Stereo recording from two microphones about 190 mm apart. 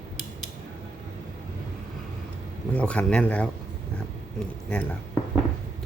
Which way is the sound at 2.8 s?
5° left (ahead or behind).